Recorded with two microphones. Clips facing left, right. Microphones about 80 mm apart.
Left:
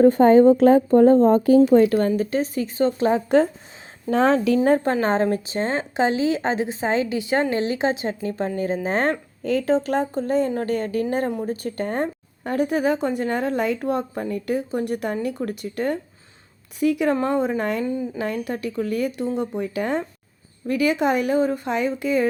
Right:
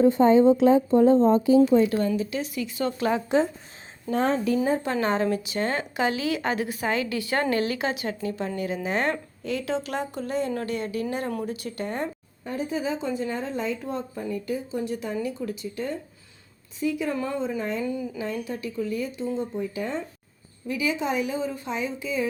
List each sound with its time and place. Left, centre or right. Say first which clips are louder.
0.0 s speech: left 4 dB; left
3.2 s speech: left 5 dB; left
4.1 s speech: left 5 dB; left
4.8 s a woman's voice: left 4 dB; left
12.5 s speech: left 7 dB; left